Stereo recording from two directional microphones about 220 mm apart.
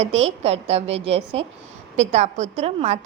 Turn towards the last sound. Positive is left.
turn(degrees=-30)  # may be behind; listen again after turning